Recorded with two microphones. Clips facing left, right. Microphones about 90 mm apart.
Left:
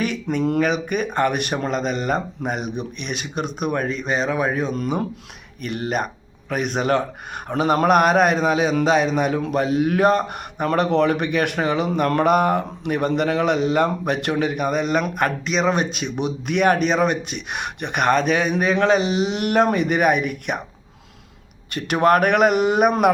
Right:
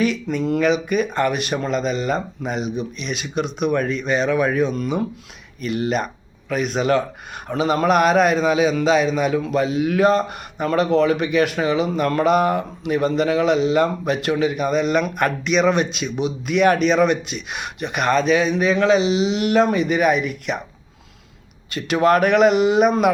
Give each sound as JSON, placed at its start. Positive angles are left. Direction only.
{"t": 0.0, "sound": "a man's voice", "side_deg": 50}
{"t": 16.1, "sound": "a man's voice", "side_deg": 55}
{"t": 17.3, "sound": "a man's voice", "side_deg": 55}
{"t": 21.8, "sound": "a man's voice", "side_deg": 55}